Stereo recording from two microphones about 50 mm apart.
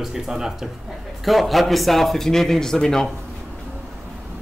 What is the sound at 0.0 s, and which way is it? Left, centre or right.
A man's voice, centre.